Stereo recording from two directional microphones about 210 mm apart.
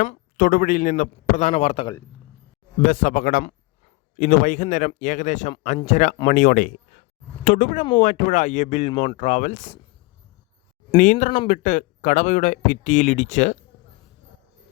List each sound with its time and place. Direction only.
0.0 s a man's voice: 40° left (ahead or behind)
2.8 s a man's voice: 40° left (ahead or behind)
10.9 s a man's voice: 35° left (ahead or behind)